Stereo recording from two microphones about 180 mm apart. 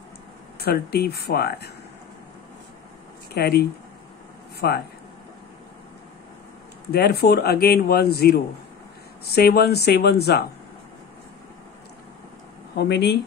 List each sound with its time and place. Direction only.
0.6 s speech: 60° left (ahead or behind)
3.3 s speech: 65° left (ahead or behind)
6.9 s speech: 60° left (ahead or behind)
12.7 s speech: 70° left (ahead or behind)